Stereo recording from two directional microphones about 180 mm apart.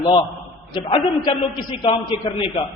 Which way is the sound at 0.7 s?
25° left (ahead or behind).